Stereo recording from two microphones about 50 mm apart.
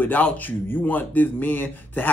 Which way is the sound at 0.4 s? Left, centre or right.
Left.